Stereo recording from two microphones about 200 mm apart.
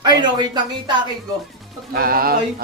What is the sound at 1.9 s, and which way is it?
Speech, 45° right (ahead or behind).